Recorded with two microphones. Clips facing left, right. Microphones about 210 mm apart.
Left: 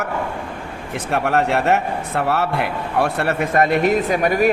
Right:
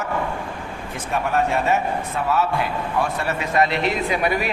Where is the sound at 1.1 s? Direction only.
70° left (ahead or behind).